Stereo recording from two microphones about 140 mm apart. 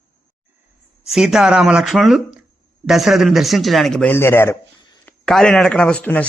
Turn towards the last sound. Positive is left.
turn(degrees=10)  # may be behind; listen again after turning